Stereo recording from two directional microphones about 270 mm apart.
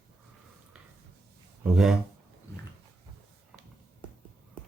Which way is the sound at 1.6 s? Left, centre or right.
Centre.